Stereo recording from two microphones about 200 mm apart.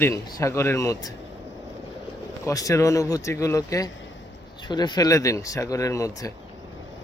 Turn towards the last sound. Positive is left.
turn(degrees=15)  # may be behind; listen again after turning